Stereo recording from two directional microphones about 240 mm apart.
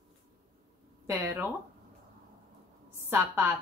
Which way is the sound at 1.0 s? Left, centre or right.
Centre.